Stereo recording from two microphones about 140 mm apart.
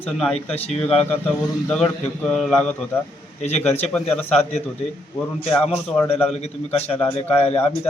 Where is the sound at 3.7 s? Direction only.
50° left (ahead or behind).